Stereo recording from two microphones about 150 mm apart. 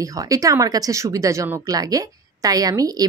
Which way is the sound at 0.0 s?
25° right (ahead or behind).